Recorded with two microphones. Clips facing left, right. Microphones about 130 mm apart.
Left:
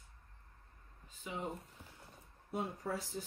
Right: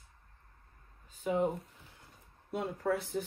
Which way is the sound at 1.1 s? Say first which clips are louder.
Right 13 dB; 60° right (ahead or behind).